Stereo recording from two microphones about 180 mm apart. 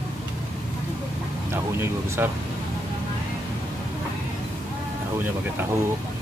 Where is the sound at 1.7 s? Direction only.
15° right (ahead or behind).